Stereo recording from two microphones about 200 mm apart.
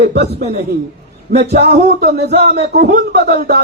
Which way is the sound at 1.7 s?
55° right (ahead or behind).